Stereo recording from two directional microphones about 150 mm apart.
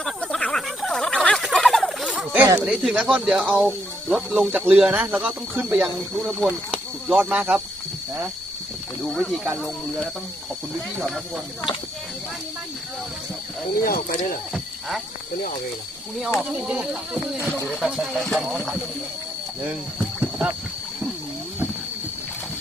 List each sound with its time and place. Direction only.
0.0 s fowl: 5° left (ahead or behind)
2.3 s speech: 15° right (ahead or behind)
9.0 s speech: centre (ahead or behind)
13.8 s speech: 75° left (ahead or behind)
14.5 s frog: centre (ahead or behind)
16.4 s speech: 5° right (ahead or behind)
17.3 s speech: 15° left (ahead or behind)
17.7 s speech: centre (ahead or behind)
19.6 s a sound: 10° right (ahead or behind)